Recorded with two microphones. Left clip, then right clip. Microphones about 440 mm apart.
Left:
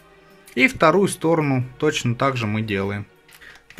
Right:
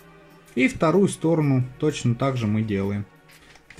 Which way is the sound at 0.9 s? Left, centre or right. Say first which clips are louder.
Left 3 dB; left.